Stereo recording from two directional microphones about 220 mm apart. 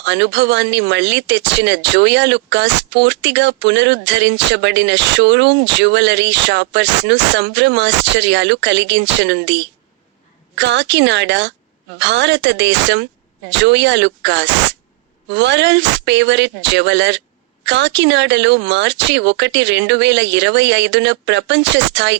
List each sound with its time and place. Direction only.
0.0 s speech: 50° right (ahead or behind)